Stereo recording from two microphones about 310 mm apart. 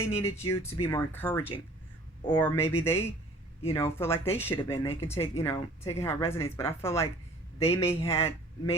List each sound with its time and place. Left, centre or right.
0.4 s speech: centre
7.6 s a man's voice: centre